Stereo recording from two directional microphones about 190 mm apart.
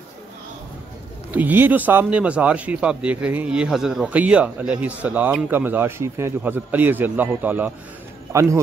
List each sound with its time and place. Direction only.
1.3 s a man's voice: 10° right (ahead or behind)